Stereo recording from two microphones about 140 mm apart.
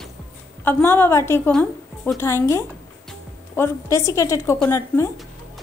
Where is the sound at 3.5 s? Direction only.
20° left (ahead or behind).